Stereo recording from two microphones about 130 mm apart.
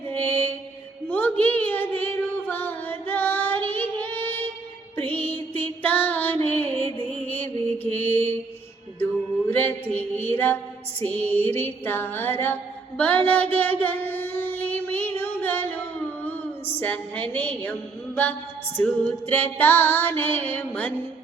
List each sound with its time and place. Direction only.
0.1 s mantra: 15° left (ahead or behind)
1.0 s a sound: 15° left (ahead or behind)
4.9 s music: 15° left (ahead or behind)
9.5 s mantra: 15° left (ahead or behind)
11.0 s music: 15° left (ahead or behind)
13.0 s child singing: 10° left (ahead or behind)
15.2 s music: 15° left (ahead or behind)
16.2 s a sound: 15° left (ahead or behind)
17.6 s a woman's voice: 15° left (ahead or behind)
18.8 s music: 15° left (ahead or behind)